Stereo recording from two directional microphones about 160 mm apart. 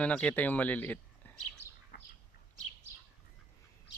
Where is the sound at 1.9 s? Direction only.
75° left (ahead or behind).